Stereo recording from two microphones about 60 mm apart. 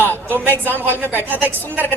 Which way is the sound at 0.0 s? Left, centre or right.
Right.